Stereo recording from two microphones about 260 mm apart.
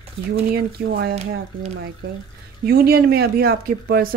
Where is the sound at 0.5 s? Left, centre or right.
Right.